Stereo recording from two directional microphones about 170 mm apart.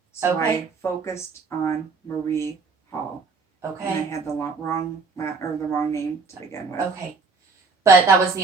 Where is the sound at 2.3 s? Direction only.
15° left (ahead or behind).